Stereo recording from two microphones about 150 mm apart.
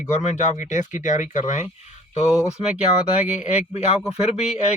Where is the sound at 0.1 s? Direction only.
50° left (ahead or behind).